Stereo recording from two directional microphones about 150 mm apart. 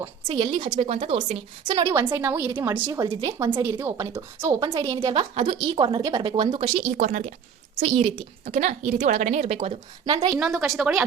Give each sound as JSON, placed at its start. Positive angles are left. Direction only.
{"t": 0.0, "sound": "a woman's voice", "side_deg": -35}
{"t": 2.1, "sound": "a woman's voice", "side_deg": -15}
{"t": 5.3, "sound": "a woman's voice", "side_deg": -40}
{"t": 6.9, "sound": "speech", "side_deg": -55}
{"t": 7.8, "sound": "a woman's voice", "side_deg": -45}
{"t": 10.3, "sound": "speech", "side_deg": -5}